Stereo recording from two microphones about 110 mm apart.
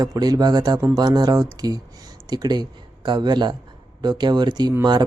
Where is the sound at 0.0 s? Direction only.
35° right (ahead or behind).